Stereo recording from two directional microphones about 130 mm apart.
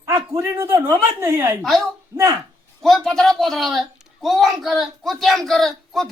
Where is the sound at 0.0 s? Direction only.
20° right (ahead or behind).